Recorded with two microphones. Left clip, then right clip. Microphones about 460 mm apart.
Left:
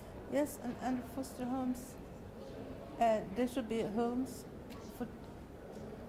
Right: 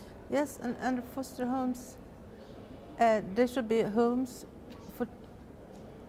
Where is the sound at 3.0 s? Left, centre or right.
Right.